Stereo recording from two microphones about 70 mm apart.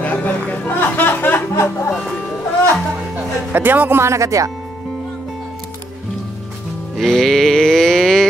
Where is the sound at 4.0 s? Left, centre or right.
Right.